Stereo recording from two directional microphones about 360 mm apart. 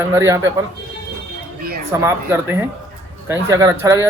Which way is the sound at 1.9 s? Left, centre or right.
Centre.